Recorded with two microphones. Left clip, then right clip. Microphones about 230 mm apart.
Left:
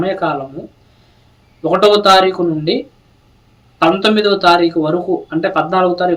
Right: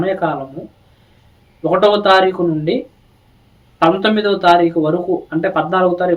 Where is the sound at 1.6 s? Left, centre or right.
Centre.